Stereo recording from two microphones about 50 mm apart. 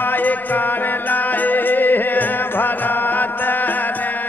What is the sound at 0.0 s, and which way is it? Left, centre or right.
Music, left.